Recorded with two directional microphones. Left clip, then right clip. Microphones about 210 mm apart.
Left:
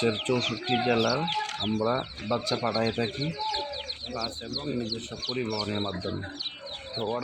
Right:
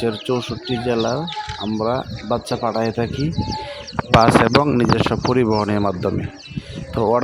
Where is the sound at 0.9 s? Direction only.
35° right (ahead or behind).